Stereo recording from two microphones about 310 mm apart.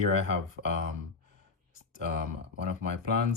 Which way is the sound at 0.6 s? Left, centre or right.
Right.